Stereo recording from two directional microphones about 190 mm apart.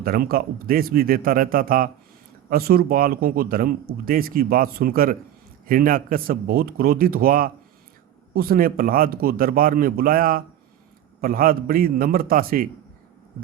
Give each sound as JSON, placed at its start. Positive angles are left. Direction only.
{"t": 0.0, "sound": "speech", "side_deg": -50}